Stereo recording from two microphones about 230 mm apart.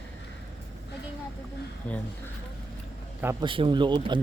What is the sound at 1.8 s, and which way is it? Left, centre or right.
Speech, centre.